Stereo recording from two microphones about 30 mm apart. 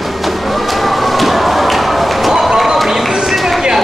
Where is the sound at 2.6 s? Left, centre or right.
Centre.